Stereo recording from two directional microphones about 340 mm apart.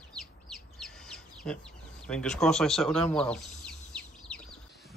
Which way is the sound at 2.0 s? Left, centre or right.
Centre.